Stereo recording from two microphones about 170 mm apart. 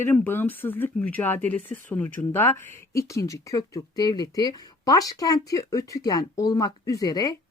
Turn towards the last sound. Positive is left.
turn(degrees=20)  # may be behind; listen again after turning